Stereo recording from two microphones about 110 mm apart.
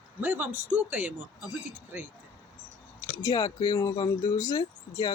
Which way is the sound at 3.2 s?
35° left (ahead or behind).